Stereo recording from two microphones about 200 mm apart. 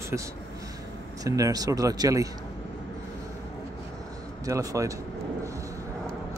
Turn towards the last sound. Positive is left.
turn(degrees=-15)  # may be behind; listen again after turning